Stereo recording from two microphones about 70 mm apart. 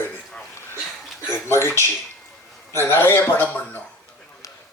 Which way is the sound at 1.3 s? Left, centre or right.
Left.